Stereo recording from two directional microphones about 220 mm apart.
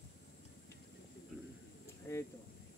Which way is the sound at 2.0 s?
10° left (ahead or behind).